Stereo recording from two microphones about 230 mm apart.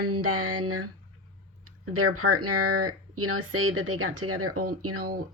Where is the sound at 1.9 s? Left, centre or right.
Right.